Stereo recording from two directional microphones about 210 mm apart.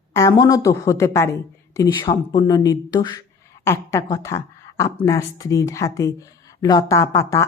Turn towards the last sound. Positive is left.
turn(degrees=15)  # may be behind; listen again after turning